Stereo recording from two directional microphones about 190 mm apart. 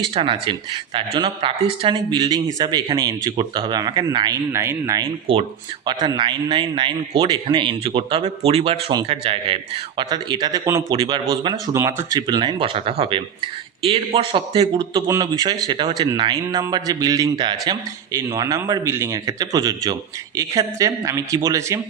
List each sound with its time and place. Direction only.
0.0 s speech: 25° right (ahead or behind)